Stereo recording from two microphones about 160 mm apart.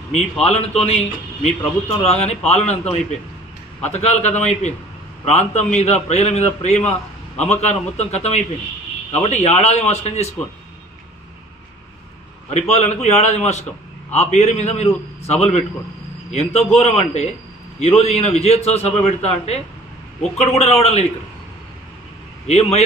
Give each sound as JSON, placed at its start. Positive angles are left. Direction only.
{"t": 0.1, "sound": "a man's voice", "side_deg": 40}
{"t": 3.8, "sound": "a man's voice", "side_deg": 40}
{"t": 12.4, "sound": "a man's voice", "side_deg": 45}
{"t": 22.5, "sound": "a man's voice", "side_deg": 40}